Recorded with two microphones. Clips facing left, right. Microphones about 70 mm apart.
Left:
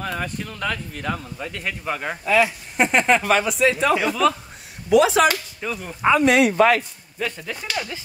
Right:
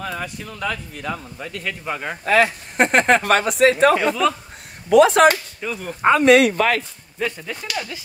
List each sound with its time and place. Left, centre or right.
0.0 s a sound: left
0.6 s speech: left
1.9 s speech: centre
2.2 s speech: right
4.1 s speech: centre
4.8 s speech: right
5.6 s speech: centre
6.0 s speech: right
6.5 s speech: left